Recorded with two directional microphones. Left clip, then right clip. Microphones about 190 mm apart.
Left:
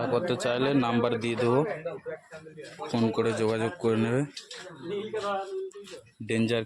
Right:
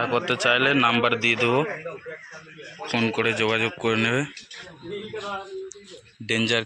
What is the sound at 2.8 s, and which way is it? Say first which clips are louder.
Speech: right 4 dB; 35° right (ahead or behind).